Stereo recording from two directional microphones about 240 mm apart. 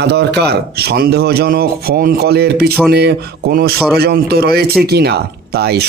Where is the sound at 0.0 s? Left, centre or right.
Right.